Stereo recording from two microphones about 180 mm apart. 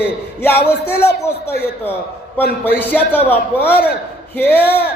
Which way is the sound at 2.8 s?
10° left (ahead or behind).